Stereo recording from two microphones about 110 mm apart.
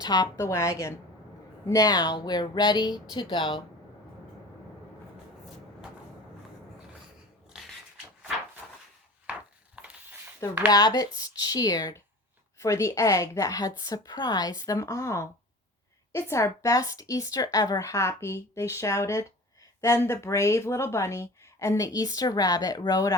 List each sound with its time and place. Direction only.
0.0 s a woman's voice: 40° left (ahead or behind)
0.3 s a woman's voice: 25° left (ahead or behind); by 3.6 s 45° left (ahead or behind)
7.5 s dog: centre (ahead or behind)
9.8 s a sound: 10° right (ahead or behind)
10.7 s a woman's voice: 35° left (ahead or behind)